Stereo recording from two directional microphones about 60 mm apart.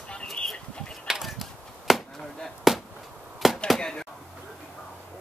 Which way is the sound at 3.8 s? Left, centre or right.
Centre.